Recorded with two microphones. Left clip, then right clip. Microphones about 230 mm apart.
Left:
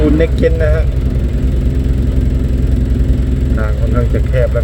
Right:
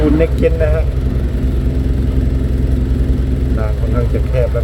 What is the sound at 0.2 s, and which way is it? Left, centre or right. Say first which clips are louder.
Speech: left 1 dB; centre.